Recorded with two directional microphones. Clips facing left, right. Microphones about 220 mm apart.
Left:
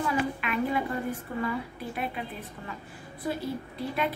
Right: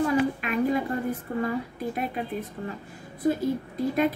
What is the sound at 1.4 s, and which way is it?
A woman's voice, 40° right (ahead or behind).